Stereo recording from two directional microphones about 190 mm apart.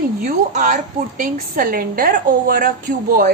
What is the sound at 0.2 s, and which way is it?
A woman's voice, 45° right (ahead or behind).